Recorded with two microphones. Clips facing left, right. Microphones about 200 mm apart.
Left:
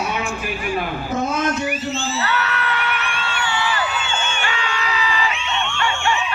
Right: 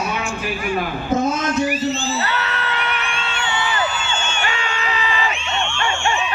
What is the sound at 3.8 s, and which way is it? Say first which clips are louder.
Crowd: right 1 dB; 45° right (ahead or behind).